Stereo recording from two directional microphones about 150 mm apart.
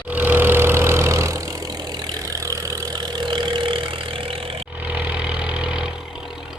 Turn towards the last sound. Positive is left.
turn(degrees=-5)  # may be behind; listen again after turning